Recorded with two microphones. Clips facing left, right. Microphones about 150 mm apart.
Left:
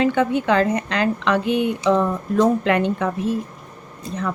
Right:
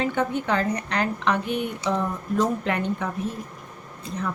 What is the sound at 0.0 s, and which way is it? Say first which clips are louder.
Speech: left 6 dB; 90° left.